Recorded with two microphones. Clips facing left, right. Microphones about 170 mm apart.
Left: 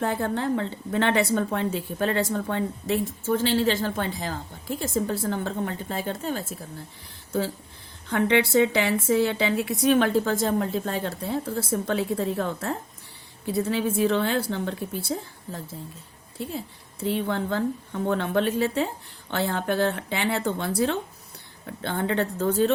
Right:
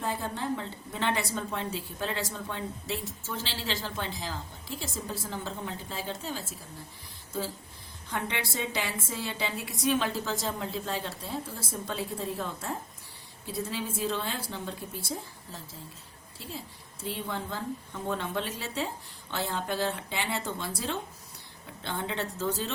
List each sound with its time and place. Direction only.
0.0 s a woman's voice: 65° left (ahead or behind)
8.1 s a woman's voice: 65° left (ahead or behind)